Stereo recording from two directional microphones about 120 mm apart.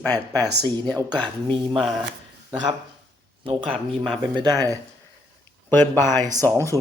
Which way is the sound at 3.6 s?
5° left (ahead or behind).